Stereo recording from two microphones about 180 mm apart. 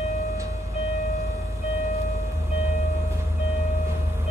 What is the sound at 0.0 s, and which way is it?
Train, 35° left (ahead or behind).